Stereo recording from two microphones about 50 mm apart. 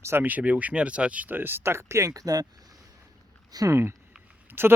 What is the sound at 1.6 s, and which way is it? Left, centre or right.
Speech, right.